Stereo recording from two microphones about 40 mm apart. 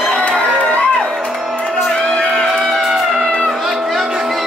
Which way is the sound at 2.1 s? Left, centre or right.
Centre.